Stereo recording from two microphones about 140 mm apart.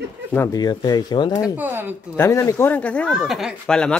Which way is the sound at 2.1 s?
20° left (ahead or behind).